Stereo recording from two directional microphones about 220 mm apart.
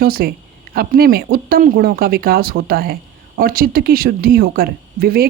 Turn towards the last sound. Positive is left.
turn(degrees=-45)  # may be behind; listen again after turning